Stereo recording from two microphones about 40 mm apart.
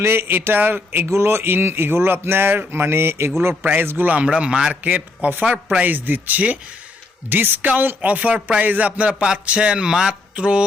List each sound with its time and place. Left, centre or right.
0.0 s speech: right
3.6 s speech: right
4.1 s speech: right
4.7 s a man's voice: right
5.8 s speech: right
7.3 s a man's voice: right
9.5 s speech: right
10.1 s a sound: right